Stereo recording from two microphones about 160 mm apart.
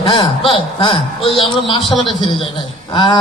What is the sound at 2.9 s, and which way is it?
Speech, 25° left (ahead or behind).